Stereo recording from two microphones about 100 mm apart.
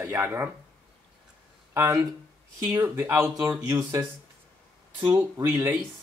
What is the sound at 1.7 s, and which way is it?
Speech, 30° right (ahead or behind).